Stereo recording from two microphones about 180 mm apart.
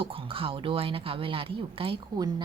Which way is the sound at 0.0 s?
30° right (ahead or behind).